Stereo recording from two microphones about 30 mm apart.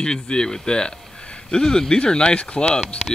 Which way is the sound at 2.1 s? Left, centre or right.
Left.